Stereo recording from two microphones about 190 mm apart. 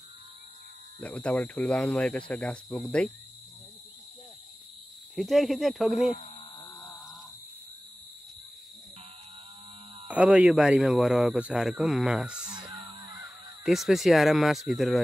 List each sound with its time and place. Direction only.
1.0 s speech: 5° left (ahead or behind)
5.1 s speech: centre (ahead or behind)
10.0 s speech: 5° right (ahead or behind)
12.5 s music: 25° right (ahead or behind)
13.7 s speech: centre (ahead or behind)